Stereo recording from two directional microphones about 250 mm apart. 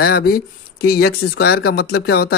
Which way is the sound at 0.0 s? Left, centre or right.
Left.